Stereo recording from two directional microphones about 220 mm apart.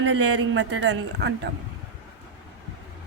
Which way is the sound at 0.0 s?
55° right (ahead or behind).